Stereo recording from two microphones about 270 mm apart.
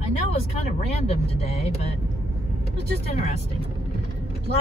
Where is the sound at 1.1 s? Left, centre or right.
Left.